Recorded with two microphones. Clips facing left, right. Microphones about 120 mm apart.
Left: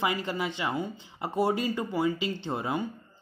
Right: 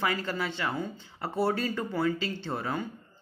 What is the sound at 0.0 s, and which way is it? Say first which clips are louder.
Speech: left 1 dB; 15° left (ahead or behind).